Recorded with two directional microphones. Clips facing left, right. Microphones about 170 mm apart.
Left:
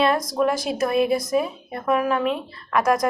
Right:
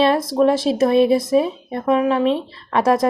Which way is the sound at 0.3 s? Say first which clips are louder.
Right 6 dB; 25° right (ahead or behind).